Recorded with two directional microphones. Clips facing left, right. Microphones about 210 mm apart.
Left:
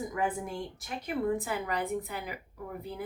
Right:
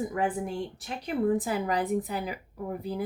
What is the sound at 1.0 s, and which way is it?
A woman's voice, 35° right (ahead or behind).